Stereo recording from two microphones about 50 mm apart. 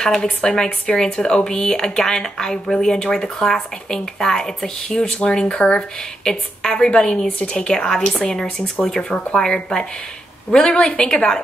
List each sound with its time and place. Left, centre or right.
0.0 s speech: centre